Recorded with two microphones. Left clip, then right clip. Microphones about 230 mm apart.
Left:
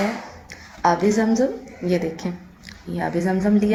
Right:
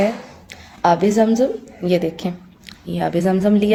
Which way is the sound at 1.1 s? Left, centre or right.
Right.